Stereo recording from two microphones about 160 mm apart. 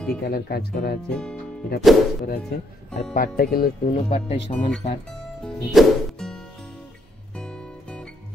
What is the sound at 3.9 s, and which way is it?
Speech, 40° left (ahead or behind).